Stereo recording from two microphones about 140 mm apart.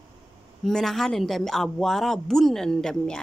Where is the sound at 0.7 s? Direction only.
5° left (ahead or behind).